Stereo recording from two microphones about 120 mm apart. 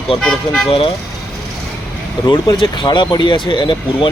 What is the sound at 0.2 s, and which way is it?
Speech, 5° left (ahead or behind).